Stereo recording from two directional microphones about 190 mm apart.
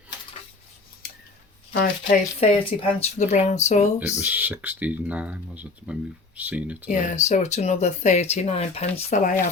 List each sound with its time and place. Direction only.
1.7 s speech: 50° left (ahead or behind)
2.4 s speech: 30° left (ahead or behind)
4.2 s speech: 10° right (ahead or behind)
6.9 s speech: 40° left (ahead or behind)